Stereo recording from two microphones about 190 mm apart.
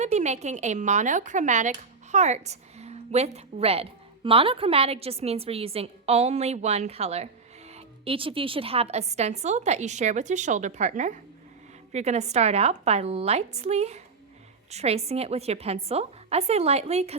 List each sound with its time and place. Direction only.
0.0 s a woman's voice: 35° right (ahead or behind)